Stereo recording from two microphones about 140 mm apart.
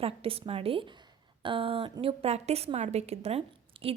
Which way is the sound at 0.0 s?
45° right (ahead or behind).